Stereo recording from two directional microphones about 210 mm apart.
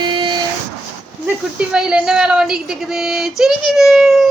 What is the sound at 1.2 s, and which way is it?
A woman's voice, 5° right (ahead or behind).